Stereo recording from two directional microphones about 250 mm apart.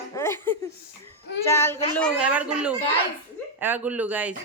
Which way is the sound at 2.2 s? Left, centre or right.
Centre.